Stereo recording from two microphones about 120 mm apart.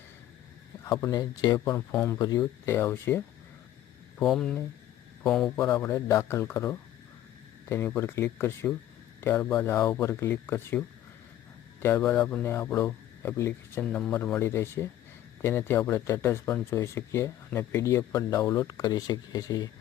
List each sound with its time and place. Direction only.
1.0 s speech: 30° left (ahead or behind)
4.2 s speech: 5° left (ahead or behind)
5.8 s speech: 25° left (ahead or behind)
7.9 s speech: 25° left (ahead or behind)
13.8 s speech: 5° left (ahead or behind)
14.3 s speech: 20° left (ahead or behind)